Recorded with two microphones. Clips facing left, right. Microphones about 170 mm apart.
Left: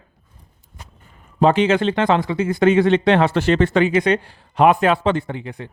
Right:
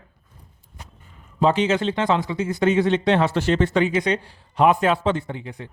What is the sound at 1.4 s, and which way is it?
Speech, 60° left (ahead or behind).